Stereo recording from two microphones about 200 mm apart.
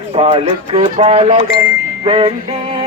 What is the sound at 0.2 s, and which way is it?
Speech, 30° right (ahead or behind).